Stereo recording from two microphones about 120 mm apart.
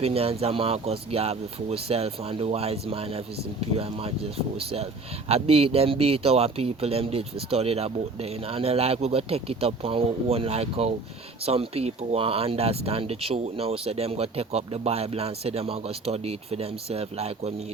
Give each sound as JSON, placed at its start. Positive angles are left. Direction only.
{"t": 0.0, "sound": "speech", "side_deg": -55}